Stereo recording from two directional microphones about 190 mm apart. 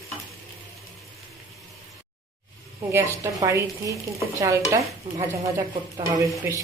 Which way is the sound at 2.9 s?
15° right (ahead or behind).